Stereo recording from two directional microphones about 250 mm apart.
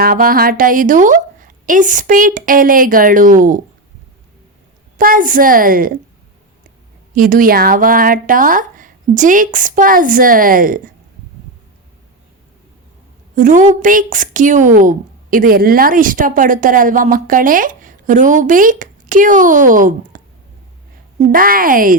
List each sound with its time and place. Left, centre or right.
0.0 s a woman's voice: right
4.9 s a woman's voice: right
7.2 s a woman's voice: right
13.3 s a woman's voice: right
21.3 s a woman's voice: right